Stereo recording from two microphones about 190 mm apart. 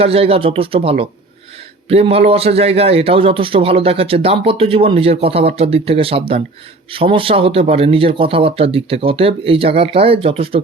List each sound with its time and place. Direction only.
0.0 s a man's voice: 30° right (ahead or behind)